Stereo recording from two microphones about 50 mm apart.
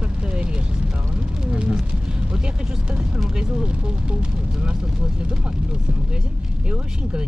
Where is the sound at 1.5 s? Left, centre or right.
Centre.